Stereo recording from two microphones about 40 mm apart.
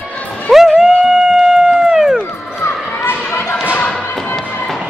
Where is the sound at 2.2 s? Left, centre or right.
Left.